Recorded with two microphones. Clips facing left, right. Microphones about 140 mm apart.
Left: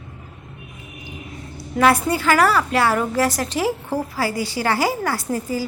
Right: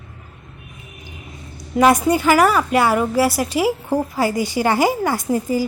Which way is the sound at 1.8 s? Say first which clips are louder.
Right 3 dB; 15° right (ahead or behind).